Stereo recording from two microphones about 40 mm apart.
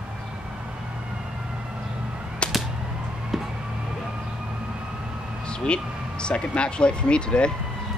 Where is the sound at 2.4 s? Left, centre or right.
Left.